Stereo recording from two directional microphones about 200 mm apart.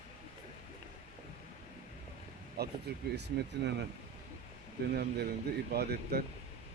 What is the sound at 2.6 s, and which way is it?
Speech, 55° right (ahead or behind).